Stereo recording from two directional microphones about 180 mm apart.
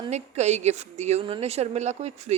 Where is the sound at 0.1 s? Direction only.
40° right (ahead or behind).